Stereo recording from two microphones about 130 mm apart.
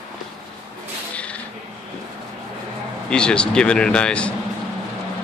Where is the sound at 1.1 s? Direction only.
10° left (ahead or behind).